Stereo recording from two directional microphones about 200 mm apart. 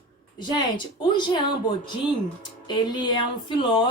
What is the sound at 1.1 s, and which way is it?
Speech, 20° left (ahead or behind).